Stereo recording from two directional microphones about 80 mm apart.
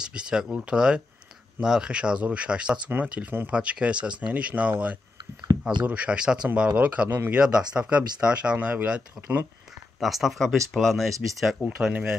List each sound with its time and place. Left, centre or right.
0.0 s speech: centre
9.9 s speech: centre
11.6 s speech: centre